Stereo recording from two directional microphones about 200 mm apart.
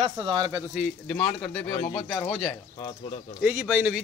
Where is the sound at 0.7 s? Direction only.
5° right (ahead or behind).